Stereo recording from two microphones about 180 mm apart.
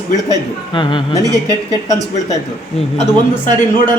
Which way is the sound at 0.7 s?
25° left (ahead or behind).